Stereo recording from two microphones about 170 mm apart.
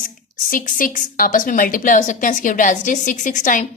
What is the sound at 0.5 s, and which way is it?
A woman's voice, 55° left (ahead or behind).